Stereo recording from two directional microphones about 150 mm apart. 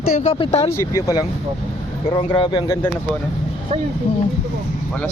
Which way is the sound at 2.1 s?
35° left (ahead or behind).